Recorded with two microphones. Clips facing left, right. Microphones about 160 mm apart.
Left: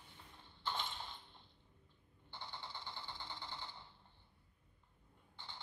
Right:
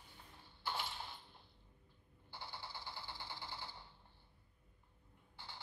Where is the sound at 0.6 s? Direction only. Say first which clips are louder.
Even; 10° right (ahead or behind).